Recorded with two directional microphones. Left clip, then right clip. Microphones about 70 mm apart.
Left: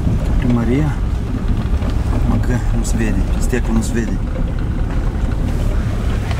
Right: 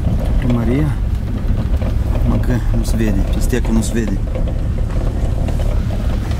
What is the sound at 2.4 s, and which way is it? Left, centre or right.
Speech, centre.